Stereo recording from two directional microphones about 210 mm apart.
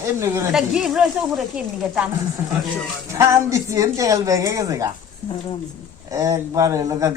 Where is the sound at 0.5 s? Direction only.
Centre (ahead or behind).